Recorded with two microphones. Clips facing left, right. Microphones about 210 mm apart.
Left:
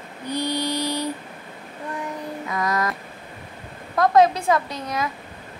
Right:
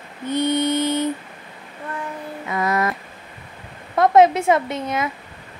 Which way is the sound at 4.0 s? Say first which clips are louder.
Right 3 dB; 25° right (ahead or behind).